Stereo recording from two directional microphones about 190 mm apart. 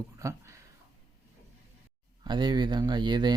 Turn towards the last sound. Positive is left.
turn(degrees=-25)  # may be behind; listen again after turning